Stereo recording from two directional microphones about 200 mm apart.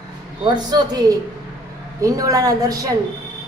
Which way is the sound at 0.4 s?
20° right (ahead or behind).